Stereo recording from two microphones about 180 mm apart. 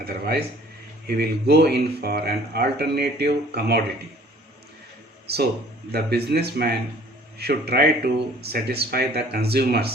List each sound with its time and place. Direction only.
0.0 s speech: 60° right (ahead or behind)
5.3 s speech: 65° right (ahead or behind)